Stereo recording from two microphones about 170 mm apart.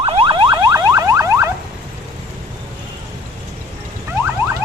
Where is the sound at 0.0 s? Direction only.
30° right (ahead or behind).